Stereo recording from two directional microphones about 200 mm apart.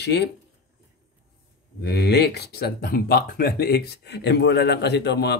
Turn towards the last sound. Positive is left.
turn(degrees=55)  # may be behind; listen again after turning